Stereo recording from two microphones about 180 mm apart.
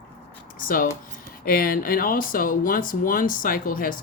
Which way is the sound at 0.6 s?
50° left (ahead or behind).